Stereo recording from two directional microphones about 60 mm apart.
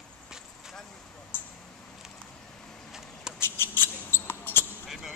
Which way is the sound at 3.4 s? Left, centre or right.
Left.